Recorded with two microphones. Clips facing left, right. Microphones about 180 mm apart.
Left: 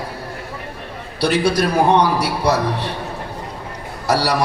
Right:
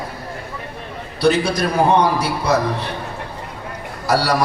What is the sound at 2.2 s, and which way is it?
Speech, 70° left (ahead or behind).